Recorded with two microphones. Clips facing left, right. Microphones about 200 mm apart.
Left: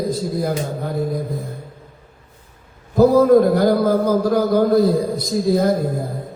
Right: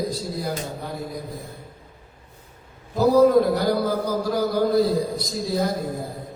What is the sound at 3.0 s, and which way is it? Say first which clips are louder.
A man's voice: left 4 dB; 50° left (ahead or behind).